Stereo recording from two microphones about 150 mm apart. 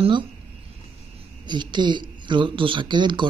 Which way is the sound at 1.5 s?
30° right (ahead or behind).